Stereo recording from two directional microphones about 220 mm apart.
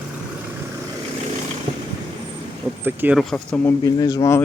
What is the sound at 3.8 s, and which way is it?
Speech, 15° left (ahead or behind).